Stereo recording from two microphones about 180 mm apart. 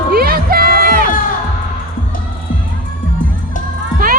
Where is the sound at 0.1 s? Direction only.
55° right (ahead or behind).